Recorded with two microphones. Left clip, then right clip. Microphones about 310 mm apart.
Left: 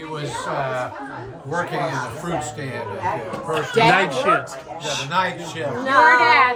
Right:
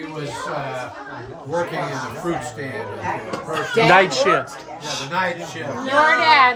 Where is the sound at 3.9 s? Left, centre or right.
Right.